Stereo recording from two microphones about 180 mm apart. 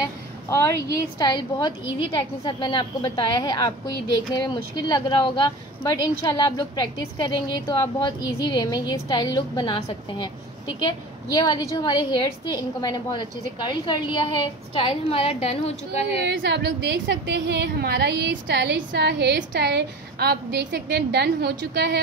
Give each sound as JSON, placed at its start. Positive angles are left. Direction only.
{"t": 0.9, "sound": "speech", "side_deg": 25}
{"t": 16.3, "sound": "a woman's voice", "side_deg": -70}